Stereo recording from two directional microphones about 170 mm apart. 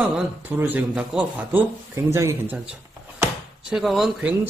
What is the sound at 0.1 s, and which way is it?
A man's voice, 10° right (ahead or behind).